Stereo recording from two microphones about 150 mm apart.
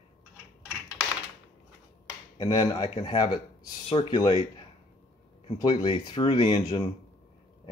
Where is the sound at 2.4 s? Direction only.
25° left (ahead or behind).